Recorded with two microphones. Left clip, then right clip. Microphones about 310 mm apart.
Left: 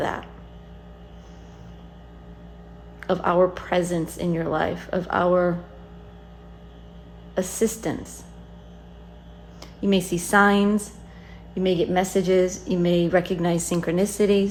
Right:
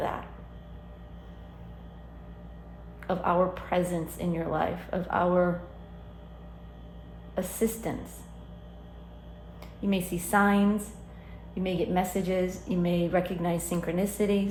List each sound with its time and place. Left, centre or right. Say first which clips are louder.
3.0 s a woman's voice: left 6 dB; left
7.3 s a woman's voice: left 6 dB; left
9.8 s a woman's voice: left 8 dB; left